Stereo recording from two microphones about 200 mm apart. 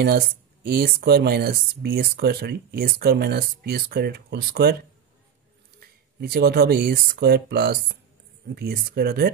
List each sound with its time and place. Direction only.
0.7 s speech: 50° right (ahead or behind)
5.8 s speech: 50° right (ahead or behind)